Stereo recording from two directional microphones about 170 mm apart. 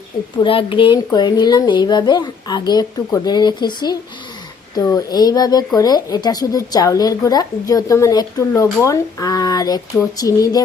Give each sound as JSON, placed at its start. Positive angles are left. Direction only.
{"t": 0.4, "sound": "a woman's voice", "side_deg": 30}